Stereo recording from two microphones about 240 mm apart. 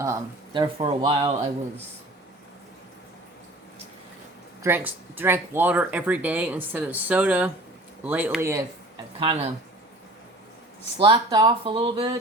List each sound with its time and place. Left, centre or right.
0.0 s speech: centre
4.6 s speech: centre
9.1 s speech: right
11.0 s speech: centre